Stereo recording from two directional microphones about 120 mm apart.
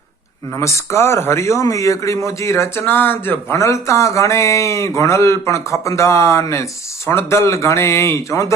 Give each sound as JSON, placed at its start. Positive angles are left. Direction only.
{"t": 0.6, "sound": "speech", "side_deg": 25}